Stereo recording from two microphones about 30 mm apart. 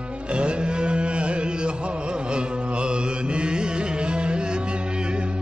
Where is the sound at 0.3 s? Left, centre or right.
Right.